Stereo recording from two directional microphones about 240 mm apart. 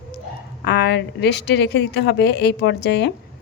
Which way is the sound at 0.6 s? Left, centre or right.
Left.